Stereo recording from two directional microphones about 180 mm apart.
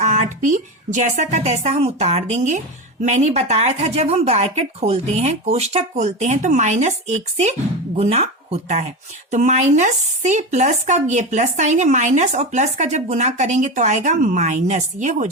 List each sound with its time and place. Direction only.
0.0 s speech: 45° right (ahead or behind)